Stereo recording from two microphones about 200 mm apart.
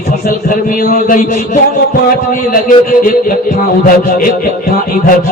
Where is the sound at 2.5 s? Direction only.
45° left (ahead or behind).